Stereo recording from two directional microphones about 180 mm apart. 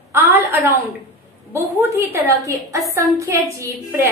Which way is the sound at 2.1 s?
15° right (ahead or behind).